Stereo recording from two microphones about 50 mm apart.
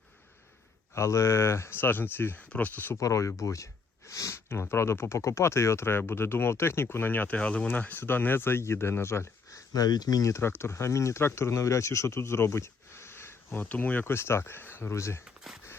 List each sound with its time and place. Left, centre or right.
0.9 s speech: left
2.5 s speech: left
2.9 s speech: left
4.4 s speech: left
7.3 s speech: left
7.9 s speech: left
11.2 s speech: left
14.0 s speech: left
15.5 s a sound: centre